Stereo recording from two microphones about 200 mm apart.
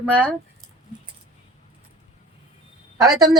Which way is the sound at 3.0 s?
15° right (ahead or behind).